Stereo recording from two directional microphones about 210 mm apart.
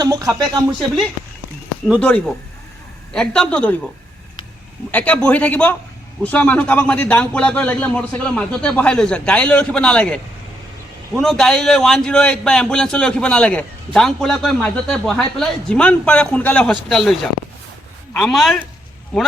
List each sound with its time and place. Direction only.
0.0 s speech: 15° right (ahead or behind)
2.0 s a man's voice: 5° left (ahead or behind)
4.9 s a man's voice: 5° left (ahead or behind)
11.2 s a man's voice: centre (ahead or behind)